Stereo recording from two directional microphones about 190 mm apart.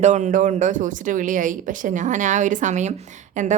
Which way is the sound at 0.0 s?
40° right (ahead or behind).